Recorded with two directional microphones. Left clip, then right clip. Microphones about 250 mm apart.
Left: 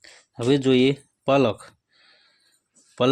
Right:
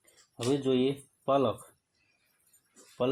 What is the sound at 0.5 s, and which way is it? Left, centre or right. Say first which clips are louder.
Speech: left 9 dB; left.